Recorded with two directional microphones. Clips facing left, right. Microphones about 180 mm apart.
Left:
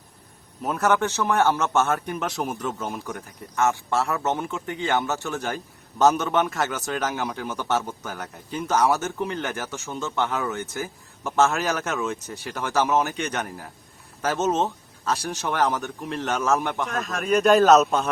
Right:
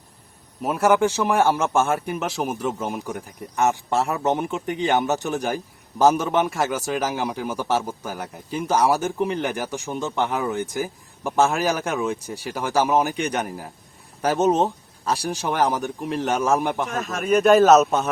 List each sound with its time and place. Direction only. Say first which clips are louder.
0.6 s a man's voice: right 4 dB; 10° right (ahead or behind)